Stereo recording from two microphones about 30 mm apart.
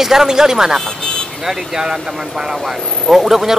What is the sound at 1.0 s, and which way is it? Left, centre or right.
Speech, left.